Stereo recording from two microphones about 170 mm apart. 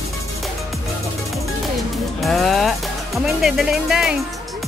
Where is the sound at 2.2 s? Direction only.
Centre (ahead or behind).